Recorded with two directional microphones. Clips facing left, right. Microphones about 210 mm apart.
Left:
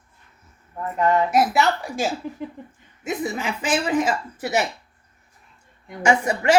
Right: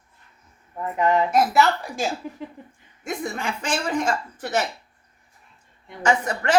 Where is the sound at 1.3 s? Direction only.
Centre (ahead or behind).